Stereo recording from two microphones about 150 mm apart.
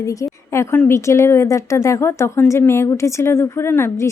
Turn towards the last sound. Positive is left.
turn(degrees=15)  # may be behind; listen again after turning